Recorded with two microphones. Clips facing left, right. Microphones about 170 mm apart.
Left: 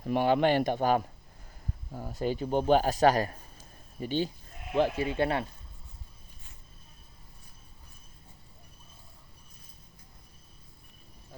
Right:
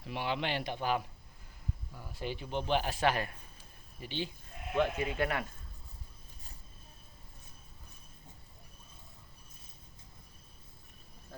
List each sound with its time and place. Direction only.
0.0 s a man's voice: 45° left (ahead or behind)
4.7 s speech: 30° left (ahead or behind)